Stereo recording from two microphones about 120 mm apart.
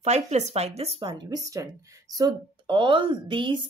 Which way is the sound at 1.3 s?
30° right (ahead or behind).